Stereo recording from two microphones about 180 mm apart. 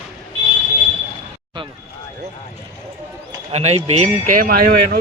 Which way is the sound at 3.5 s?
35° right (ahead or behind).